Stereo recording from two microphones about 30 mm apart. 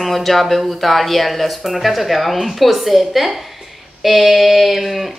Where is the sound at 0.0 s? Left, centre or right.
Centre.